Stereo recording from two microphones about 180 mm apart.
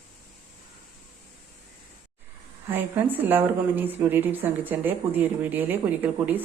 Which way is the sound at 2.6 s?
10° right (ahead or behind).